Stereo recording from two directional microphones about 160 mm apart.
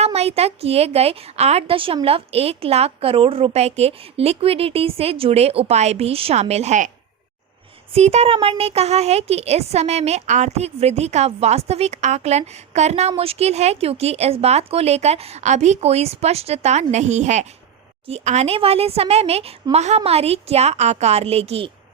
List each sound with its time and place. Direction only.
0.0 s speech: 40° right (ahead or behind)
7.9 s a woman's voice: 45° right (ahead or behind)